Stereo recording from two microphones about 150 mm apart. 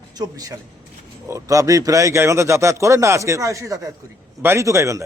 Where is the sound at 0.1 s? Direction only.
25° right (ahead or behind).